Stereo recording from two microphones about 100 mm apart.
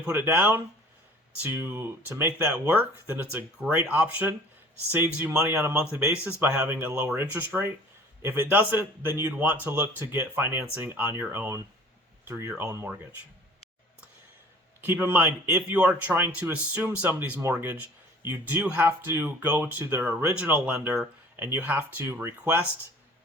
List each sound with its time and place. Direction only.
0.0 s a man's voice: 15° right (ahead or behind)
5.7 s a man's voice: 10° right (ahead or behind)
14.8 s a man's voice: 15° right (ahead or behind)
19.8 s a man's voice: 25° right (ahead or behind)
20.3 s a man's voice: 15° right (ahead or behind)